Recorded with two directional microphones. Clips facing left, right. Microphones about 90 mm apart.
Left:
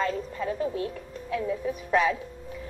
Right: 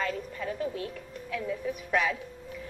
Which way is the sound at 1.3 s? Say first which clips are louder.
Left 4 dB; 30° left (ahead or behind).